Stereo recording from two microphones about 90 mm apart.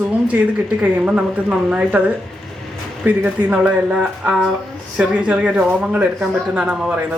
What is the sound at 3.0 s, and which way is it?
Speech, 15° right (ahead or behind).